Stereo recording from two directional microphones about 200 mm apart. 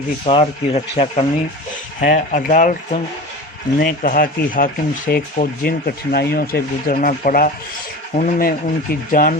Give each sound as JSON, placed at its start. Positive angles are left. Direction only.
{"t": 0.3, "sound": "speech", "side_deg": 30}